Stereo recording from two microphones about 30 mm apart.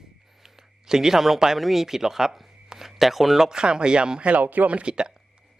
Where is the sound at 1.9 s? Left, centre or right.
Centre.